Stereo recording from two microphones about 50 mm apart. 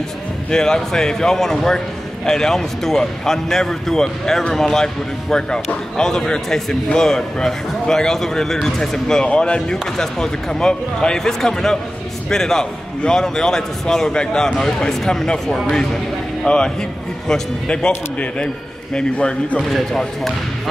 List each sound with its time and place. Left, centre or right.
0.5 s a man's voice: centre
19.7 s speech: centre